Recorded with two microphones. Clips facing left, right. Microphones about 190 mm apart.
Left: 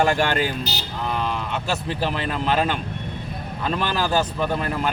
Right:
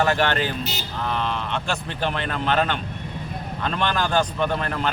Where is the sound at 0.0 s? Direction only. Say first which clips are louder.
Left 1 dB; 10° left (ahead or behind).